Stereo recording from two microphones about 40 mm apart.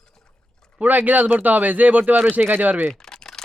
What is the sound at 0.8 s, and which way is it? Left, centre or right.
Speech, right.